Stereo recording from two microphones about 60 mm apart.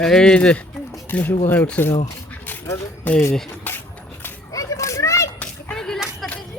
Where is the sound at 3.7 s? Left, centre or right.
Left.